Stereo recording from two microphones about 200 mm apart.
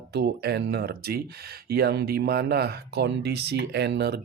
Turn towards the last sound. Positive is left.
turn(degrees=-55)  # may be behind; listen again after turning